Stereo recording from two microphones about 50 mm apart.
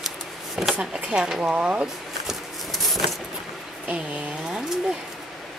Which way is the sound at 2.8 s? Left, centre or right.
Centre.